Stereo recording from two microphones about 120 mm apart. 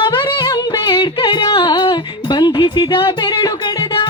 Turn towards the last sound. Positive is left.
turn(degrees=45)  # may be behind; listen again after turning